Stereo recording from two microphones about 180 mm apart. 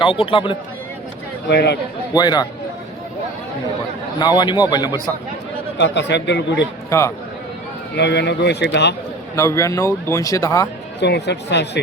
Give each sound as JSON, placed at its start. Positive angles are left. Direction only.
{"t": 0.0, "sound": "speech", "side_deg": 30}
{"t": 1.5, "sound": "a man's voice", "side_deg": 65}
{"t": 2.1, "sound": "speech", "side_deg": 20}
{"t": 4.2, "sound": "speech", "side_deg": 25}
{"t": 5.7, "sound": "a man's voice", "side_deg": 75}
{"t": 7.9, "sound": "a man's voice", "side_deg": 70}
{"t": 9.3, "sound": "a man's voice", "side_deg": 15}
{"t": 11.0, "sound": "a man's voice", "side_deg": 70}